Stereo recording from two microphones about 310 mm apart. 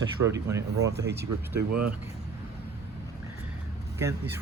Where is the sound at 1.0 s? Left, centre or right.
Right.